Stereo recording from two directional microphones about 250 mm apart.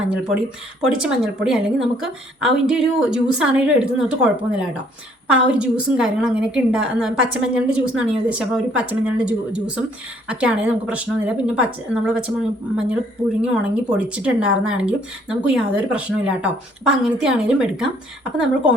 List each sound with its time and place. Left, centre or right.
1.0 s a woman's voice: centre